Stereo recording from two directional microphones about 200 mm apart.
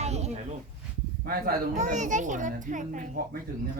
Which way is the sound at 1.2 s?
40° right (ahead or behind).